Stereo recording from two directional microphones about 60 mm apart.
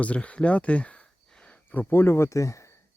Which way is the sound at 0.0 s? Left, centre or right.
Left.